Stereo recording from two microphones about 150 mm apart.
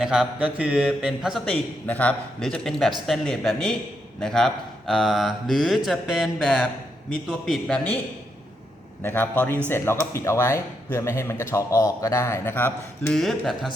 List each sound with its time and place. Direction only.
0.0 s speech: 5° right (ahead or behind)
1.9 s speech: 10° left (ahead or behind)
9.0 s speech: 15° left (ahead or behind)
13.1 s speech: centre (ahead or behind)